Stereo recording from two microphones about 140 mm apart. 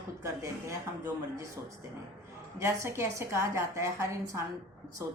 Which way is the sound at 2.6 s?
20° right (ahead or behind).